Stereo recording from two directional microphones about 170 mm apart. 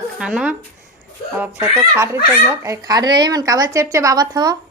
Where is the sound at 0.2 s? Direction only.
5° right (ahead or behind); by 4.5 s 25° right (ahead or behind).